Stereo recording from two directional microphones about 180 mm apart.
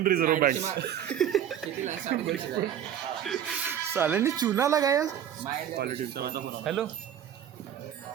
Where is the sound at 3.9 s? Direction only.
10° right (ahead or behind).